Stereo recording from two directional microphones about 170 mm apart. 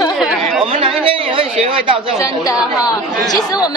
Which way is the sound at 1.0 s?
30° right (ahead or behind).